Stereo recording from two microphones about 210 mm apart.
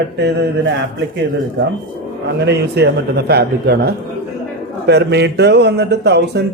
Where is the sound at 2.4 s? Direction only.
55° right (ahead or behind).